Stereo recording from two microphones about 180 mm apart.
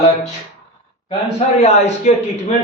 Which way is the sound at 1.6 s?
40° left (ahead or behind).